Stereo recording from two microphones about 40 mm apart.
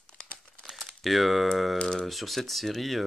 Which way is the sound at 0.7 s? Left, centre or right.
Centre.